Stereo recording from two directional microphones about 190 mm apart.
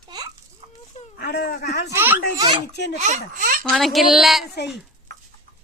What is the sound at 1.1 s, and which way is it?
Speech, 55° left (ahead or behind).